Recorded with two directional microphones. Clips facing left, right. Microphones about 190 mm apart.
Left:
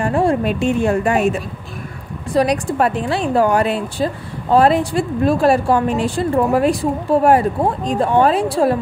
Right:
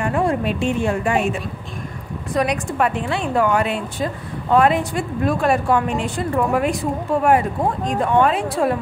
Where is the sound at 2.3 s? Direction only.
35° left (ahead or behind).